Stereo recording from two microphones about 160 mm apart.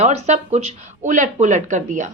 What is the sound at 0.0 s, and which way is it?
A woman's voice, 45° right (ahead or behind).